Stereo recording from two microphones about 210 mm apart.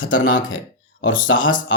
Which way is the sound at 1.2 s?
65° left (ahead or behind).